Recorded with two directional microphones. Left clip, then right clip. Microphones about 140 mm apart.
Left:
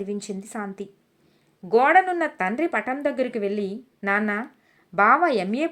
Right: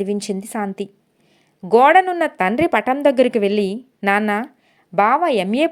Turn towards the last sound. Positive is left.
turn(degrees=-30)  # may be behind; listen again after turning